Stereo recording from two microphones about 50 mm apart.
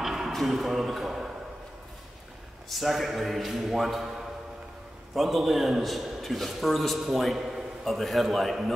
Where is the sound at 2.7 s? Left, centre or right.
Centre.